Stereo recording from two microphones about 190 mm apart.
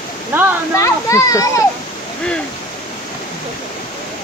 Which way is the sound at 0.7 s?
15° left (ahead or behind).